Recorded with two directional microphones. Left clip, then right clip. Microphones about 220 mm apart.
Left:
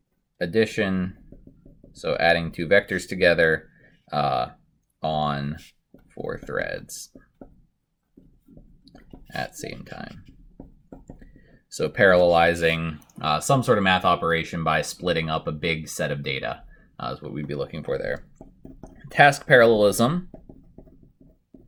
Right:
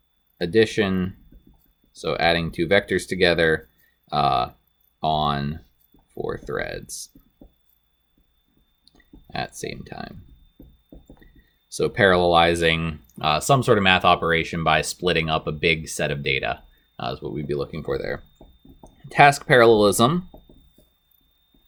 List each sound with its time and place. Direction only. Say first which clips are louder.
0.3 s speech: right 3 dB; 40° right (ahead or behind)
8.9 s speech: right 1 dB; 40° right (ahead or behind)
11.8 s speech: left 1 dB; 40° right (ahead or behind)